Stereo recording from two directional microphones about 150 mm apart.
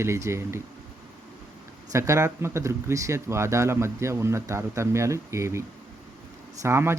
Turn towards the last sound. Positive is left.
turn(degrees=-15)  # may be behind; listen again after turning